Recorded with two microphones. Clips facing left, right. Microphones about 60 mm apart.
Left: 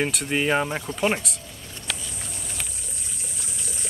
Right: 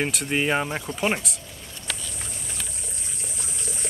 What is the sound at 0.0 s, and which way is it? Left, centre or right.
Speech, centre.